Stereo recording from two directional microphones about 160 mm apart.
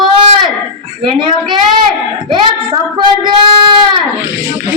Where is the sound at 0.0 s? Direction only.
30° right (ahead or behind).